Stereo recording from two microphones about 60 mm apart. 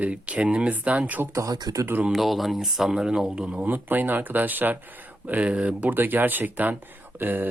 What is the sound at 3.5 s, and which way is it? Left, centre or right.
Speech, right.